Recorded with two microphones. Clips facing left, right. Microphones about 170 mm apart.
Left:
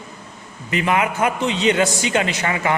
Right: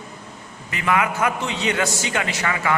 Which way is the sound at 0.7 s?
20° left (ahead or behind).